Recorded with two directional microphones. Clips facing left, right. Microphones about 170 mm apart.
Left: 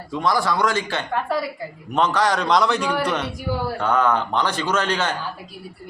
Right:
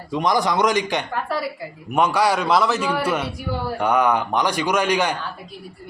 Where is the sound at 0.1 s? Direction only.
20° right (ahead or behind).